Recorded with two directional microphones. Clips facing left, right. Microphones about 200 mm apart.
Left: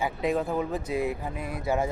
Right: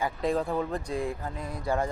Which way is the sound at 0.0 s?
5° left (ahead or behind).